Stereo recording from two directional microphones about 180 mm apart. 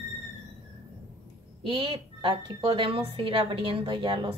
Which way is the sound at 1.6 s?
30° right (ahead or behind).